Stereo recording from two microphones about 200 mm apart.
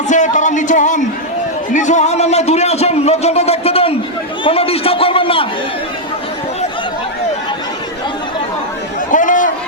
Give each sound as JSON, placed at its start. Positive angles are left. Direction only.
{"t": 0.1, "sound": "a sound", "side_deg": 40}
{"t": 1.7, "sound": "a man's voice", "side_deg": 35}
{"t": 9.1, "sound": "chatter", "side_deg": 40}